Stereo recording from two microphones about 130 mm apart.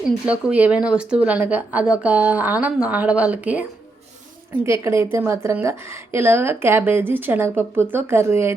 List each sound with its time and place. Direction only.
0.3 s speech: 10° right (ahead or behind)
4.6 s a woman's voice: 20° right (ahead or behind)